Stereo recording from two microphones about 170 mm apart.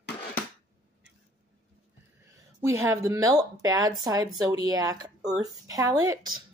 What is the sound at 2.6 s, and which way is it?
Speech, 20° right (ahead or behind).